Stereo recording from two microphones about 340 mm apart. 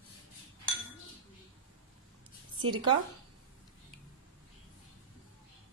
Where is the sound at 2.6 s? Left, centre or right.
Right.